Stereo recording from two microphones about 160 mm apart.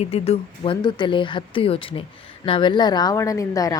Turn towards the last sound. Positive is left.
turn(degrees=20)  # may be behind; listen again after turning